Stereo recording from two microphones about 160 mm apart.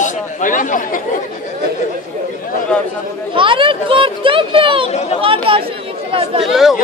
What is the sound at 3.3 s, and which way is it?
A child's voice, 30° right (ahead or behind).